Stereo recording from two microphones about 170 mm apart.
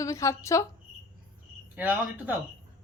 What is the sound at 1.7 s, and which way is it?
Speech, 10° right (ahead or behind).